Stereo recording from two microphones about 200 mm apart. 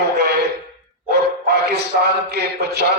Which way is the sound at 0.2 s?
55° right (ahead or behind).